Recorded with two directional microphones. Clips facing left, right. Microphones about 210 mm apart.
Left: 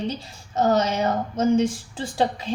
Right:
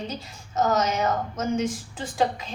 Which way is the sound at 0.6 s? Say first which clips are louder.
Left 3 dB; 30° left (ahead or behind).